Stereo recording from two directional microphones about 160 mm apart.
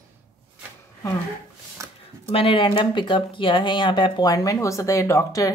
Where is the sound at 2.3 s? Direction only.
35° left (ahead or behind).